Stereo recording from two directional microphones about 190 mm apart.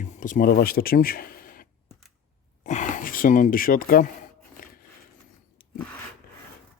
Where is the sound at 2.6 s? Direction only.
40° left (ahead or behind).